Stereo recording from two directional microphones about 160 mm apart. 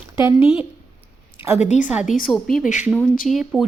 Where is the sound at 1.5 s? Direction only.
45° left (ahead or behind).